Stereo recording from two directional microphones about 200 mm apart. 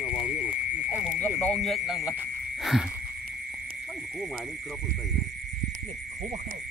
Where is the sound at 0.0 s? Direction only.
35° left (ahead or behind).